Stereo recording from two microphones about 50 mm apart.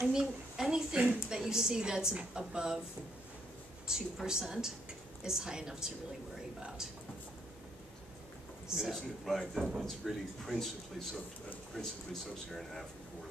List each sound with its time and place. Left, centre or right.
0.0 s a woman's voice: centre
3.8 s a woman's voice: centre
8.7 s speech: centre